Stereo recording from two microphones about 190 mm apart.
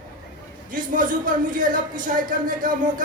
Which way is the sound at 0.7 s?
45° right (ahead or behind).